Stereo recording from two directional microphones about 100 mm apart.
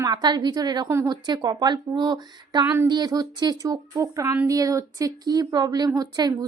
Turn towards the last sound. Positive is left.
turn(degrees=-40)  # may be behind; listen again after turning